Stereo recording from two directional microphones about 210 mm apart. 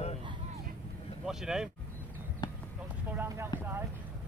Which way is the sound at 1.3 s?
Centre (ahead or behind).